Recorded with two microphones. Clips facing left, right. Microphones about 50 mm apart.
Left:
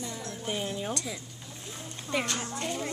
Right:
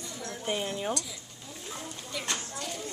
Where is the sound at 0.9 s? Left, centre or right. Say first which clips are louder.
Even; left.